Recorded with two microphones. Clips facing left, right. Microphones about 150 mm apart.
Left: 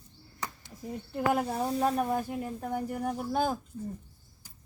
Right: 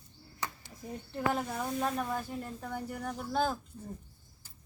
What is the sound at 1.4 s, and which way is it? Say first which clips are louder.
Speech: left 5 dB; 35° left (ahead or behind).